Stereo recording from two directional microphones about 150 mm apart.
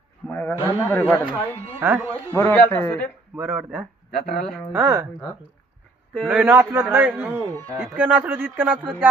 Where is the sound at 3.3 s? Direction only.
10° right (ahead or behind).